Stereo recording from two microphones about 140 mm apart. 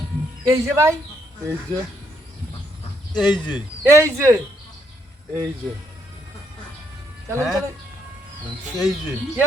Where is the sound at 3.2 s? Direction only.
30° left (ahead or behind).